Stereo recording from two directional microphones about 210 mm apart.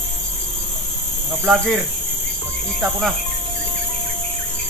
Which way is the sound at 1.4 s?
Centre (ahead or behind).